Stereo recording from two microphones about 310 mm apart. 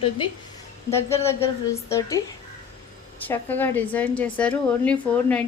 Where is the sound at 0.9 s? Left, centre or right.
Centre.